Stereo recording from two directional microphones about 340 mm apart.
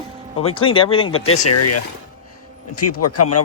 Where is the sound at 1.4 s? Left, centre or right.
Left.